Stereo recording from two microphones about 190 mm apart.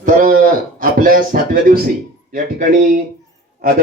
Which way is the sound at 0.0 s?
45° right (ahead or behind).